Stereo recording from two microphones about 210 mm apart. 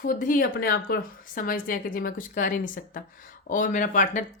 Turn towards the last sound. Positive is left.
turn(degrees=40)  # may be behind; listen again after turning